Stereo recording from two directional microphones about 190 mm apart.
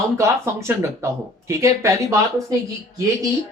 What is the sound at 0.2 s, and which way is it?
Speech, 15° right (ahead or behind).